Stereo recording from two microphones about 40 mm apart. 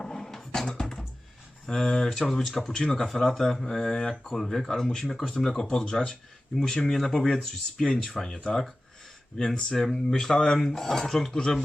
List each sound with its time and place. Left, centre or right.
0.0 s dishes: centre
1.6 s speech: centre
3.1 s speech: centre
5.8 s speech: left
6.6 s speech: centre
9.7 s speech: centre